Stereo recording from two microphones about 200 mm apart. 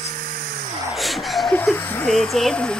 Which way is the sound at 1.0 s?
Centre (ahead or behind).